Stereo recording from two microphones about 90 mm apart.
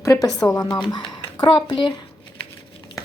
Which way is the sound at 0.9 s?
60° left (ahead or behind).